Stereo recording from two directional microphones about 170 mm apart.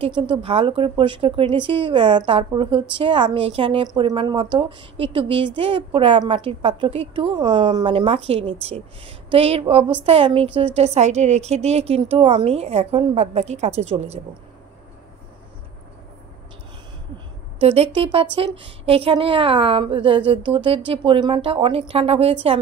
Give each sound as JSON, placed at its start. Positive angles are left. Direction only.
{"t": 0.0, "sound": "speech", "side_deg": -30}
{"t": 17.6, "sound": "speech", "side_deg": -35}